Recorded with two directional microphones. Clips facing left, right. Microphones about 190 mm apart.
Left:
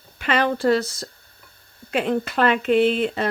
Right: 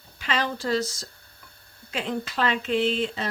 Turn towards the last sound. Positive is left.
turn(degrees=55)  # may be behind; listen again after turning